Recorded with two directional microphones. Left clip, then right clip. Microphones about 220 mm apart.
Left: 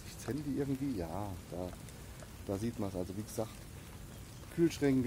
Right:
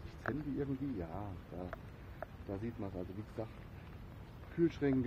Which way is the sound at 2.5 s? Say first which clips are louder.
Left 7 dB; 30° left (ahead or behind).